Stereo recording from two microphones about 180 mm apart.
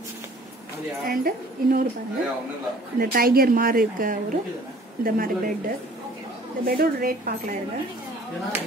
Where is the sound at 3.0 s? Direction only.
55° right (ahead or behind).